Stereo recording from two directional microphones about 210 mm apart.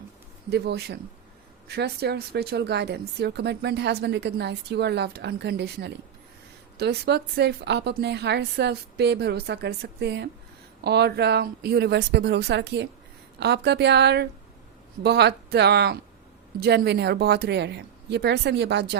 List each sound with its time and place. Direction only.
0.5 s speech: 50° right (ahead or behind)